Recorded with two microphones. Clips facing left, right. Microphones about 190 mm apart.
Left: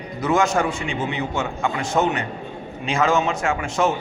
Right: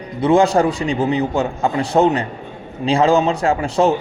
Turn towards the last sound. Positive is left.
turn(degrees=-35)  # may be behind; listen again after turning